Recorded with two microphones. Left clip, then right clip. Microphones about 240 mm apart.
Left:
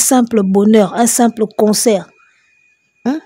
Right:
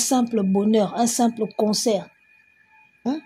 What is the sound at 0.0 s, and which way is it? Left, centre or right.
A woman's voice, left.